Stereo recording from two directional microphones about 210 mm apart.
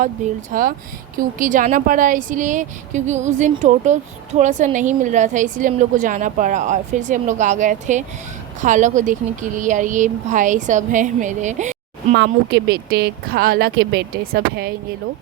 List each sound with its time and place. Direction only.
0.5 s a woman's voice: 40° right (ahead or behind)
12.1 s speech: 50° right (ahead or behind)